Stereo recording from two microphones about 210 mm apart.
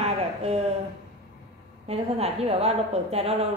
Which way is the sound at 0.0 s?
30° right (ahead or behind).